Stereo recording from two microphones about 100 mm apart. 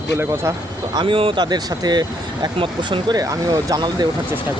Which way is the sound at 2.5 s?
60° right (ahead or behind).